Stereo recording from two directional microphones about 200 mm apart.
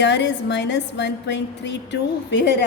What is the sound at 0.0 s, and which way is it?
A woman's voice, 60° left (ahead or behind).